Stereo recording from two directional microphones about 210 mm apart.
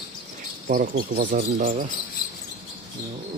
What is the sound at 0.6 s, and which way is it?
Speech, 35° right (ahead or behind).